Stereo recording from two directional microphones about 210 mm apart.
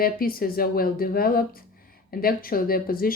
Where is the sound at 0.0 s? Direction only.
45° left (ahead or behind).